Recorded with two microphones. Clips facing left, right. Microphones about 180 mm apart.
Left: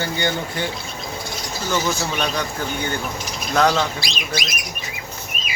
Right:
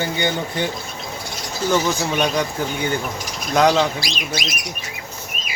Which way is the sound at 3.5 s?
15° right (ahead or behind).